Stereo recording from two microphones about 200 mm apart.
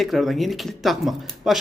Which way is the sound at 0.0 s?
Centre (ahead or behind).